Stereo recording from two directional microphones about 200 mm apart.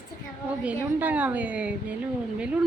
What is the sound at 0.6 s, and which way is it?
A woman's voice, 5° right (ahead or behind).